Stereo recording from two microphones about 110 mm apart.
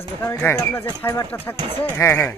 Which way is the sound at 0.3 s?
20° left (ahead or behind).